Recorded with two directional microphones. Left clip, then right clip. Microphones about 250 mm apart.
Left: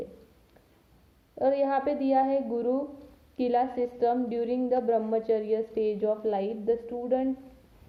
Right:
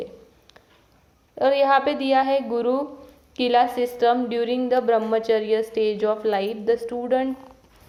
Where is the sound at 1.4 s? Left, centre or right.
Centre.